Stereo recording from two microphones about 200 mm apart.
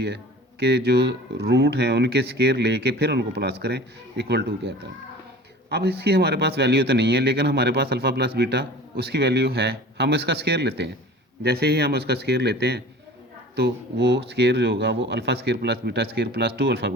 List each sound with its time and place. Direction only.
0.6 s speech: 55° right (ahead or behind)
5.6 s speech: 55° right (ahead or behind)